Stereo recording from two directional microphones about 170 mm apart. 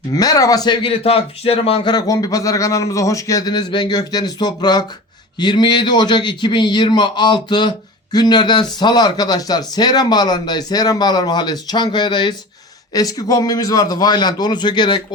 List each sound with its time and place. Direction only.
0.1 s speech: 20° left (ahead or behind)